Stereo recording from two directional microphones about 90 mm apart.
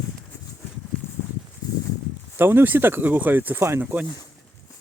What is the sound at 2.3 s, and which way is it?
Speech, 25° right (ahead or behind).